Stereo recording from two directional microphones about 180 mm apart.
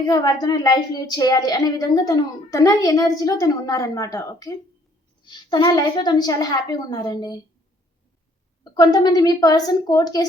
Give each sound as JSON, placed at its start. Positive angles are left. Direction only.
{"t": 0.0, "sound": "a woman's voice", "side_deg": 20}
{"t": 8.6, "sound": "a woman's voice", "side_deg": 20}